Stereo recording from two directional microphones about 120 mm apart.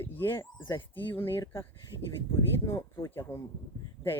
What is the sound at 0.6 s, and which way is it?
Speech, 40° left (ahead or behind).